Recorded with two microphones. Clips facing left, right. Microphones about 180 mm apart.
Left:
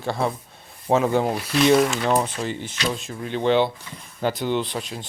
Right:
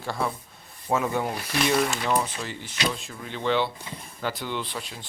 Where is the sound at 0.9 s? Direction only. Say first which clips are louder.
Left 6 dB; 30° left (ahead or behind).